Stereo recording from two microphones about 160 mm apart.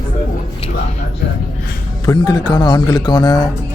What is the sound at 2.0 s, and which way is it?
Speech, 25° left (ahead or behind).